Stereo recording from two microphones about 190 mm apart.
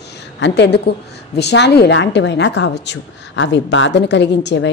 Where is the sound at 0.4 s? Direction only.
65° left (ahead or behind).